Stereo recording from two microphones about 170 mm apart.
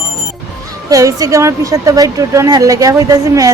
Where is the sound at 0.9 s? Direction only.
20° right (ahead or behind).